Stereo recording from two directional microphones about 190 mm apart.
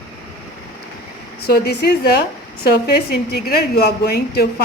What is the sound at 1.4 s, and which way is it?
A woman's voice, 55° left (ahead or behind).